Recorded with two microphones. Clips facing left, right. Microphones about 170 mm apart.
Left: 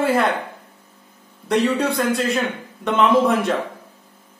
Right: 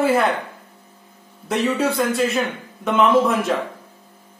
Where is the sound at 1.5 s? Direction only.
5° right (ahead or behind).